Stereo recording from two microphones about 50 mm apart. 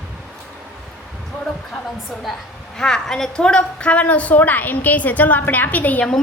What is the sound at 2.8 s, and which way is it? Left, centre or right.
A woman's voice, centre.